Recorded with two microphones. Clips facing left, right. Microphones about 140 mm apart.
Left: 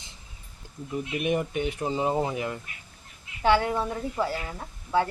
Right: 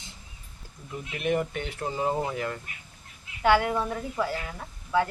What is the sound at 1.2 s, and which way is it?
Speech, 15° left (ahead or behind).